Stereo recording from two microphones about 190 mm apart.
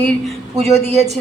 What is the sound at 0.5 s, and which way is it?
Speech, 35° right (ahead or behind).